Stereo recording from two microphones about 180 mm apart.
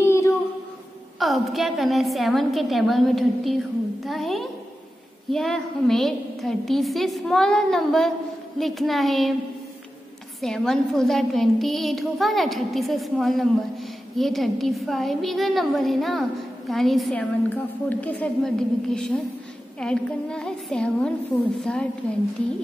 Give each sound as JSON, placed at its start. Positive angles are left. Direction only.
{"t": 0.0, "sound": "a sound", "side_deg": 15}
{"t": 1.2, "sound": "a woman's voice", "side_deg": 0}
{"t": 10.4, "sound": "a woman's voice", "side_deg": 5}